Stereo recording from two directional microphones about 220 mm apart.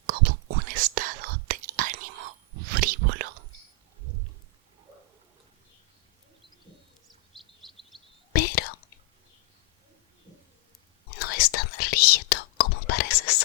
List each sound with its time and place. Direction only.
0.7 s whispering: 40° right (ahead or behind)
7.3 s bird vocalization: centre (ahead or behind)
8.3 s whispering: 45° left (ahead or behind)
11.2 s whispering: 45° left (ahead or behind)